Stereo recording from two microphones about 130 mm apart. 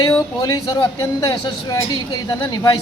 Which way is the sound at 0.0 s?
30° left (ahead or behind).